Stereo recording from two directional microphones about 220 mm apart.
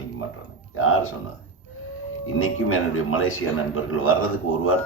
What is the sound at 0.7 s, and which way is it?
Speech, 70° left (ahead or behind).